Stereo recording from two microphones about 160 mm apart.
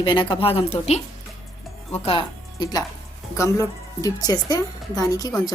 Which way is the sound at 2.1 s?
25° left (ahead or behind).